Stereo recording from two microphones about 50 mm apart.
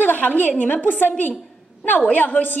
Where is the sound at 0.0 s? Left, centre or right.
Left.